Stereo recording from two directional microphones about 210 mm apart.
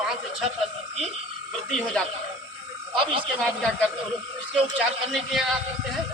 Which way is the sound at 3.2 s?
5° left (ahead or behind).